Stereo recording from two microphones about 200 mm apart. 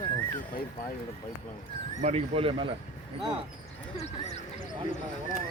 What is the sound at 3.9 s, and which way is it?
Speech, 35° left (ahead or behind).